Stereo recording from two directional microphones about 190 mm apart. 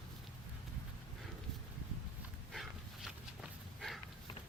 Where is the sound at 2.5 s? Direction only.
Centre (ahead or behind).